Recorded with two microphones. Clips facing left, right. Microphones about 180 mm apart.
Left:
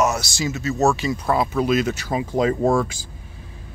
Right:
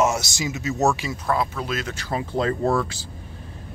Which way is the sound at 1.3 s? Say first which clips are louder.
Left 5 dB; 15° left (ahead or behind).